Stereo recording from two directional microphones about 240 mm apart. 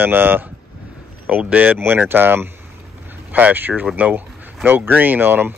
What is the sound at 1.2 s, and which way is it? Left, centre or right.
Speech, centre.